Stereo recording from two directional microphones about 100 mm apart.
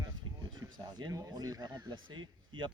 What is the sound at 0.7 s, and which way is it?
Speech, 45° right (ahead or behind).